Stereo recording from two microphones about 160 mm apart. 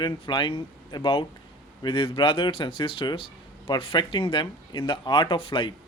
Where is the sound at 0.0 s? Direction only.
30° left (ahead or behind).